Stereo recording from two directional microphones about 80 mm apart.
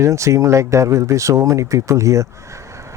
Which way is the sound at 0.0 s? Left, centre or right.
Right.